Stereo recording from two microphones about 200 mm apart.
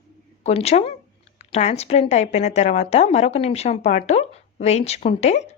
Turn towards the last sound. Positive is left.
turn(degrees=35)  # may be behind; listen again after turning